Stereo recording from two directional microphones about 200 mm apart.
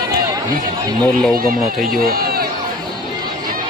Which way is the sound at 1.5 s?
Centre (ahead or behind).